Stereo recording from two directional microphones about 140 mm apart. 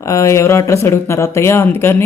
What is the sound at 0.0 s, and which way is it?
Speech, 20° left (ahead or behind).